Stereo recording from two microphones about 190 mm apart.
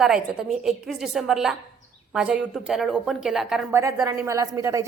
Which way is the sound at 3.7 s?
15° right (ahead or behind).